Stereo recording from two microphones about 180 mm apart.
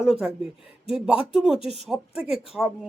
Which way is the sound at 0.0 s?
5° right (ahead or behind).